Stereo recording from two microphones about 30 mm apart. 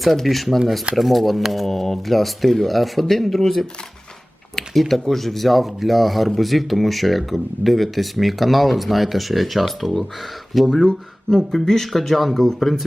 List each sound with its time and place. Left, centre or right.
0.2 s speech: centre
1.4 s speech: centre
1.6 s speech: centre
10.8 s speech: left